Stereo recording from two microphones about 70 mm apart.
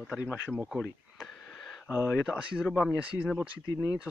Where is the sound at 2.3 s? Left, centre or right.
Centre.